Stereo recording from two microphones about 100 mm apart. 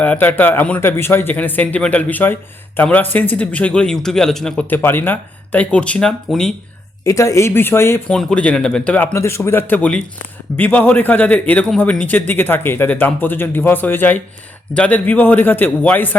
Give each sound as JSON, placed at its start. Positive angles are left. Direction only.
{"t": 0.0, "sound": "speech", "side_deg": 15}
{"t": 4.7, "sound": "speech", "side_deg": 20}
{"t": 7.0, "sound": "speech", "side_deg": 30}
{"t": 8.0, "sound": "speech", "side_deg": 5}
{"t": 9.1, "sound": "speech", "side_deg": 25}